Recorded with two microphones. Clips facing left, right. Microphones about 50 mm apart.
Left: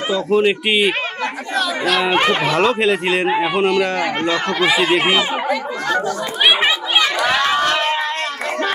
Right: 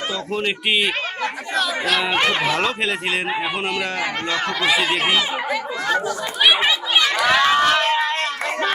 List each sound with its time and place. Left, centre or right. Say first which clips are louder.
0.1 s speech: left 11 dB; centre
2.1 s speech: left 3 dB; centre
2.4 s speech: left 5 dB; centre
4.9 s speech: left 3 dB; centre
6.4 s chatter: left 2 dB; left
7.0 s run: right 2 dB; centre